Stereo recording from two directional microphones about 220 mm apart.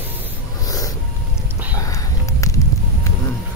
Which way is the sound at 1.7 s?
15° left (ahead or behind).